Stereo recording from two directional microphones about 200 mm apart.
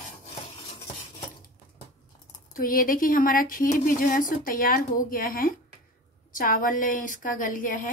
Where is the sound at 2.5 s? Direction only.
45° left (ahead or behind).